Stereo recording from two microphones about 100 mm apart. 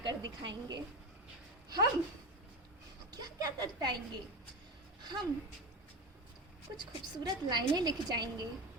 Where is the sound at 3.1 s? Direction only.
40° right (ahead or behind).